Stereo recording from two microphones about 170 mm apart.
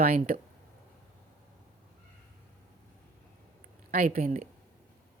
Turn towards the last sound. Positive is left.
turn(degrees=-55)  # may be behind; listen again after turning